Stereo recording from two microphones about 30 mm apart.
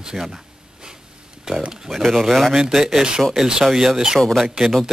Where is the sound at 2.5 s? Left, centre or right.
Centre.